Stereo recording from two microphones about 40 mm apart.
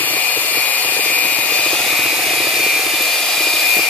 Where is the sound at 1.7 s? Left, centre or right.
Centre.